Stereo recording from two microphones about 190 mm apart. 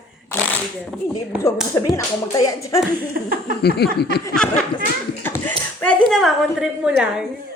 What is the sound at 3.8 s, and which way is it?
Speech, 60° left (ahead or behind).